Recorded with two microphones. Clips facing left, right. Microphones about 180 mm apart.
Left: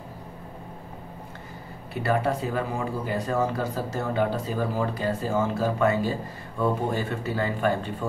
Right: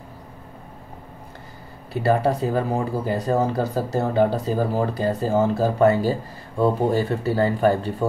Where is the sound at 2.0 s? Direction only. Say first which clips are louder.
Right 5 dB; 35° right (ahead or behind).